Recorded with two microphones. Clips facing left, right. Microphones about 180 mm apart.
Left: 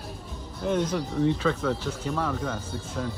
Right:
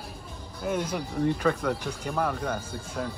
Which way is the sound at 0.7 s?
10° right (ahead or behind).